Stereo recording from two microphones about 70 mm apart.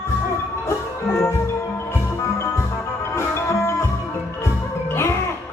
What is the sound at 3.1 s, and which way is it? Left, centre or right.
Music, left.